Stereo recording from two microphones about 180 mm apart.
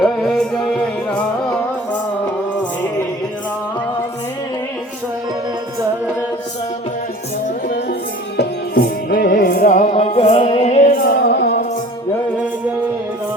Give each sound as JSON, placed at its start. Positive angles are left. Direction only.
{"t": 0.0, "sound": "music", "side_deg": 0}
{"t": 8.4, "sound": "music", "side_deg": 60}
{"t": 10.9, "sound": "music", "side_deg": 65}